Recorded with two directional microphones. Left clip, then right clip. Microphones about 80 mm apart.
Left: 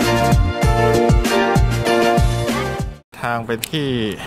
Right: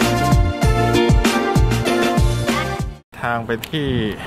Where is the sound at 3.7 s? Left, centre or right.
Left.